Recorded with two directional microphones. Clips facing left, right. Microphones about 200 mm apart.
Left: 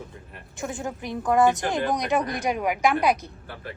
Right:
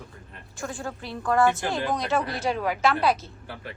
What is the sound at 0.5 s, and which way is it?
A woman's voice, 20° left (ahead or behind).